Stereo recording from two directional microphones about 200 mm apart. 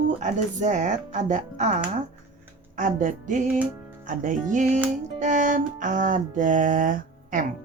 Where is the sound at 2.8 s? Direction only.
40° right (ahead or behind).